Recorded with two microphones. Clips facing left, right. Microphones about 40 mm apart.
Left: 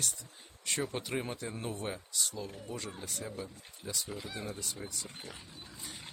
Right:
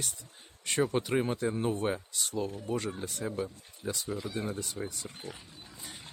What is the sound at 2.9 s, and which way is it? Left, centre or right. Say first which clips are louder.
Speech: right 6 dB; right.